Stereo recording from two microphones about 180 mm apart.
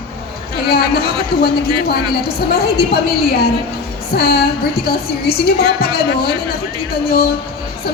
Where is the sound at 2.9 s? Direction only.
60° left (ahead or behind).